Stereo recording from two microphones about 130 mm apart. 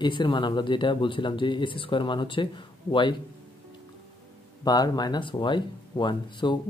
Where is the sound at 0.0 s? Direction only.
35° left (ahead or behind).